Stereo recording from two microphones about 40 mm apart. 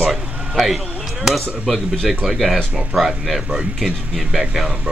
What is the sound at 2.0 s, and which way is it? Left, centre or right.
Speech, centre.